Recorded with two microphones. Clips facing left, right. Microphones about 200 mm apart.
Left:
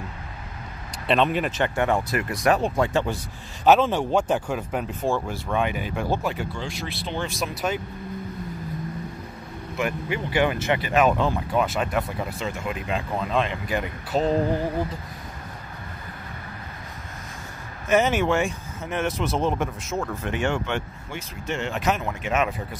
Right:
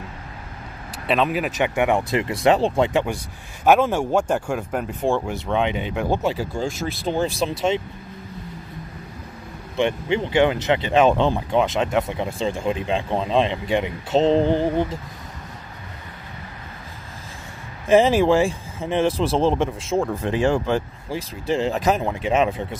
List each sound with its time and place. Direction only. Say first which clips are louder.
1.0 s speech: right 1 dB; 5° right (ahead or behind)
1.8 s speech: right 4 dB; 20° right (ahead or behind)
2.9 s speech: right 2 dB; 15° right (ahead or behind); by 4.9 s centre (ahead or behind)
5.0 s speech: right 5 dB; 15° right (ahead or behind)
6.3 s speech: right 5 dB; 40° right (ahead or behind)
9.8 s speech: right 6 dB; 25° right (ahead or behind)
17.8 s speech: right 5 dB; 30° right (ahead or behind)